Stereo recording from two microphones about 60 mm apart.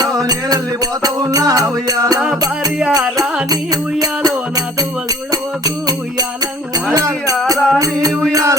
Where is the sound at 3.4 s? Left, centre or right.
Right.